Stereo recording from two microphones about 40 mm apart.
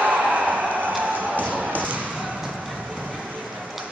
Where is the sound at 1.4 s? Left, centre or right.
Right.